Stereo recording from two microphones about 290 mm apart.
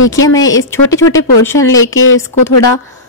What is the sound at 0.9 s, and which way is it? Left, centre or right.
A woman's voice, left.